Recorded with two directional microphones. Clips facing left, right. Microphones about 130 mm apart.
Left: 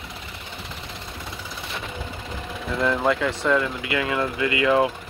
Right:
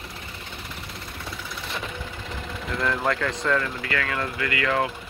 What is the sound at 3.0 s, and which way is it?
Speech, 5° left (ahead or behind).